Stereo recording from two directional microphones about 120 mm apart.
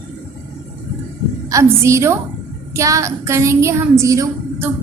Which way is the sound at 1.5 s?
25° right (ahead or behind).